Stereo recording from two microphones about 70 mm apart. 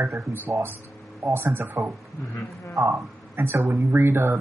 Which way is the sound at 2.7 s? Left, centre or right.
Right.